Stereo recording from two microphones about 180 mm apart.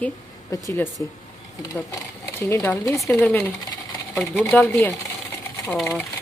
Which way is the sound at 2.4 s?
15° left (ahead or behind).